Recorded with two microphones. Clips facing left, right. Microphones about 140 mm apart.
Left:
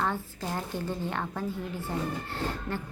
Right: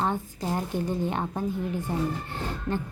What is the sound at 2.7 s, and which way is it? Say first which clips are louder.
Beatboxing: right 5 dB; 20° right (ahead or behind).